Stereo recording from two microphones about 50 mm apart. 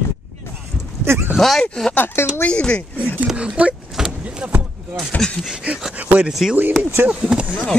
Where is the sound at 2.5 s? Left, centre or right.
Left.